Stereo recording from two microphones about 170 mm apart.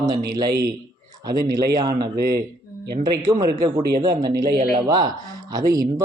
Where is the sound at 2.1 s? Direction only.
65° right (ahead or behind).